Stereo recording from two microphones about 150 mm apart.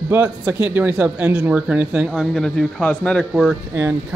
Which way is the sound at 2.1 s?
Centre (ahead or behind).